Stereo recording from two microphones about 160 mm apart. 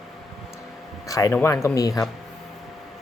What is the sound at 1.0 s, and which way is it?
Speech, 20° left (ahead or behind).